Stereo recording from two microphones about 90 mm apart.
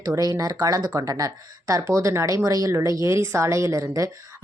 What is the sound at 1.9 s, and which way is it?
A woman's voice, 30° right (ahead or behind).